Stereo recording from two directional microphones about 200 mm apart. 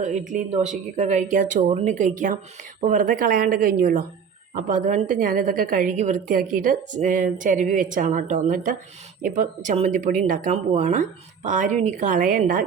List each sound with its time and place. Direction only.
0.0 s a woman's voice: 40° right (ahead or behind)